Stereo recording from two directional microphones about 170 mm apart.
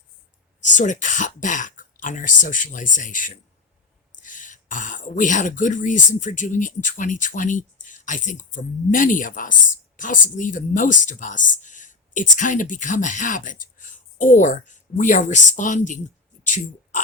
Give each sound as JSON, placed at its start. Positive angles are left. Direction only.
{"t": 0.6, "sound": "speech", "side_deg": 45}
{"t": 16.4, "sound": "oink", "side_deg": 50}